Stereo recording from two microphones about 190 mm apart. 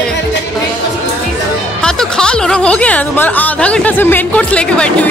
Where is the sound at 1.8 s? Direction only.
5° left (ahead or behind).